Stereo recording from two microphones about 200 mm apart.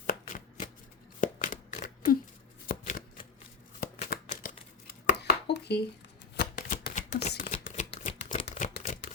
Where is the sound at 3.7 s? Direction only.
45° left (ahead or behind).